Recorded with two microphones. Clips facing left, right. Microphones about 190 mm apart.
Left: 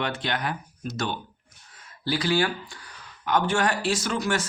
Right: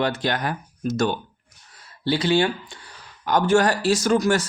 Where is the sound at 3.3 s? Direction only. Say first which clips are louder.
Right 5 dB; 40° right (ahead or behind).